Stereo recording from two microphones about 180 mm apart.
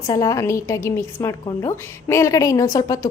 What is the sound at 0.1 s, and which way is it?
A woman's voice, 20° left (ahead or behind).